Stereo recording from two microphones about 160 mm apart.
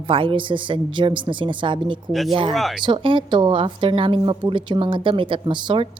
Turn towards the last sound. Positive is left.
turn(degrees=-30)  # may be behind; listen again after turning